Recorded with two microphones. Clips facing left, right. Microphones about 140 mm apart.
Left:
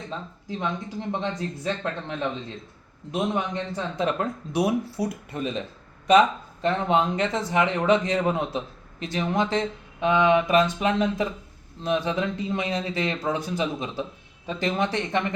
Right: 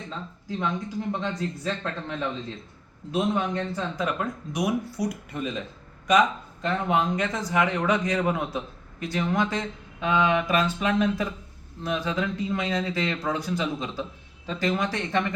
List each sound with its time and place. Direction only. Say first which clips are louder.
0.6 s speech: right 1 dB; 25° left (ahead or behind)